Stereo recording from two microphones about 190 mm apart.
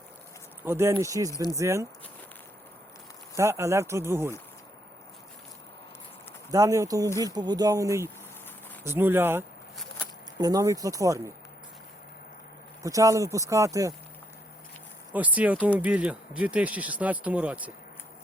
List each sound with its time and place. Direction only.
0.6 s speech: 15° right (ahead or behind)
1.3 s speech: 20° left (ahead or behind)
1.5 s speech: 15° right (ahead or behind)
3.3 s speech: 15° right (ahead or behind)
6.5 s speech: 15° right (ahead or behind)
12.8 s speech: 15° right (ahead or behind)
15.1 s speech: 10° right (ahead or behind)